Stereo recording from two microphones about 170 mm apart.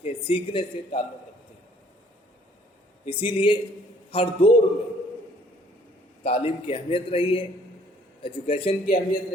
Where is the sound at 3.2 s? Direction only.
30° left (ahead or behind).